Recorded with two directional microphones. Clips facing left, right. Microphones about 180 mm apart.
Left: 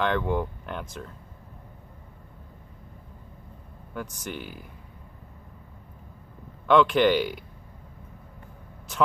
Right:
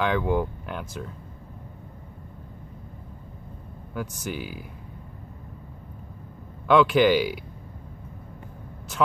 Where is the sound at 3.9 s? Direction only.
5° right (ahead or behind).